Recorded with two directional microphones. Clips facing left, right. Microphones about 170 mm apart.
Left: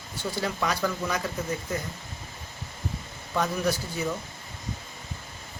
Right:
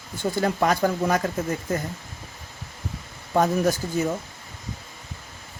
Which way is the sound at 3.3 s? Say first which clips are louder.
Right 6 dB; 45° right (ahead or behind).